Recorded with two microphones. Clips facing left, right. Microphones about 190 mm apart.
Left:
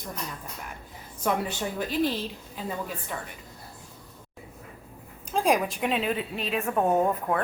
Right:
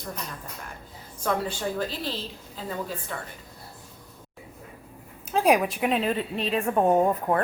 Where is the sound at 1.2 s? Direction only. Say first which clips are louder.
Even; 15° left (ahead or behind).